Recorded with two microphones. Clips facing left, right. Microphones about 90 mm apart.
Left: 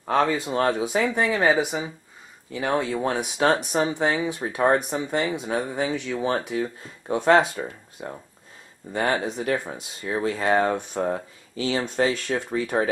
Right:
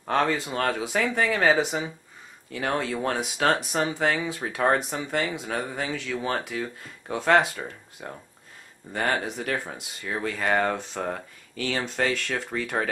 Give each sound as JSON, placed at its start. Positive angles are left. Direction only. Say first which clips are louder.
{"t": 0.0, "sound": "speech", "louder": "left 2 dB", "side_deg": 15}